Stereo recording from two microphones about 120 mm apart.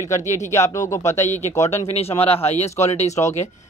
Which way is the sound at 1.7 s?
60° left (ahead or behind).